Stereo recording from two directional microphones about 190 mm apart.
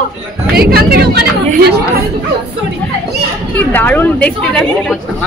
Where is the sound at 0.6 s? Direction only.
55° right (ahead or behind).